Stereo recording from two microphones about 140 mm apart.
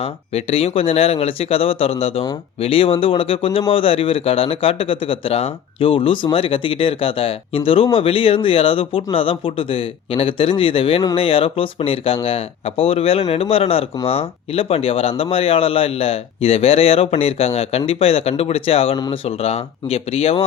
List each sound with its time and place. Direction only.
0.0 s speech: 45° left (ahead or behind)